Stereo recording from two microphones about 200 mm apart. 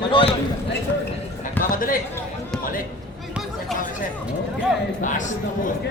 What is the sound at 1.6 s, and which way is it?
Speech, 45° left (ahead or behind).